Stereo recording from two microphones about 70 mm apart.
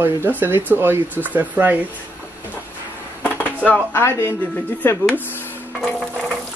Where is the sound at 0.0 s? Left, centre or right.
Right.